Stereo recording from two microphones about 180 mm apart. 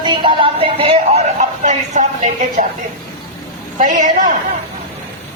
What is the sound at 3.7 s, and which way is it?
Speech, 45° right (ahead or behind).